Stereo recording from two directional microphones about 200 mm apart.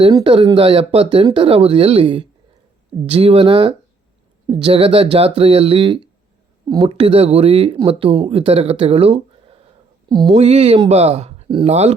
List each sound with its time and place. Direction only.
0.0 s speech: 25° right (ahead or behind)